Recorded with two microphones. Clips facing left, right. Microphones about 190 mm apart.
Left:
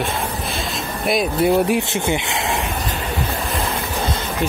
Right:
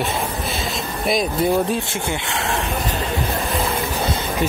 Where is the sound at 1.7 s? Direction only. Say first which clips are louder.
Left 4 dB; 20° left (ahead or behind).